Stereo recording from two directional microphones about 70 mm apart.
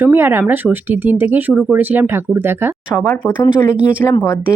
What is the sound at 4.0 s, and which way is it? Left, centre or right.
Speech, left.